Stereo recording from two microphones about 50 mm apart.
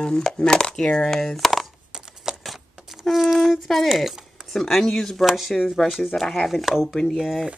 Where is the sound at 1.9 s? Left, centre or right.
Centre.